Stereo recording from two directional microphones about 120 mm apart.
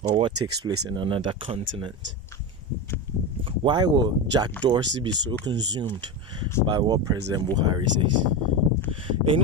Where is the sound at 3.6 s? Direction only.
40° right (ahead or behind).